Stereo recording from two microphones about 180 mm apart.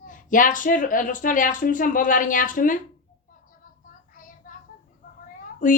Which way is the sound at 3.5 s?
50° left (ahead or behind).